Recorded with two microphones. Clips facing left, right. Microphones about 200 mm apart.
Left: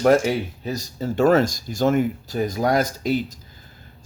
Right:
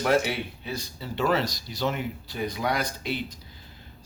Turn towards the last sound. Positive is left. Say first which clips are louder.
# left 9 dB
turn(degrees=45)  # may be behind; listen again after turning